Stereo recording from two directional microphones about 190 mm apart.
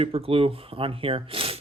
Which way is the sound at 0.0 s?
30° right (ahead or behind).